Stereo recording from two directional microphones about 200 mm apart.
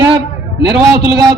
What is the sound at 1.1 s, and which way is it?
Speech, 20° right (ahead or behind).